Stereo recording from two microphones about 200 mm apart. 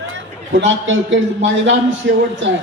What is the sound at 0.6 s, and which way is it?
A man's voice, 70° right (ahead or behind).